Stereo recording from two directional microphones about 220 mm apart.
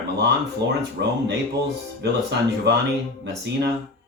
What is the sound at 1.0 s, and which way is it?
Speech, 50° right (ahead or behind).